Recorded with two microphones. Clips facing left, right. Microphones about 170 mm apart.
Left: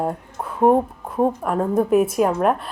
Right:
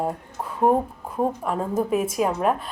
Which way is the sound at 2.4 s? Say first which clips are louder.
Left 3 dB; centre (ahead or behind).